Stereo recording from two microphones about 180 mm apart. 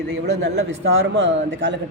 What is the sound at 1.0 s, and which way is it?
Speech, 90° right.